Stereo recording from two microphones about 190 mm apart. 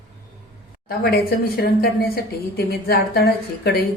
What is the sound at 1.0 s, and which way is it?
A woman's voice, 55° left (ahead or behind).